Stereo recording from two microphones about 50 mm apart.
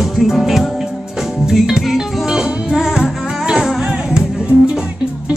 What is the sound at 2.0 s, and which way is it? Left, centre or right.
Music, centre.